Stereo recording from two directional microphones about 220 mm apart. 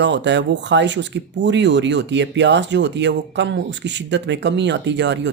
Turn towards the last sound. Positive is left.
turn(degrees=-50)  # may be behind; listen again after turning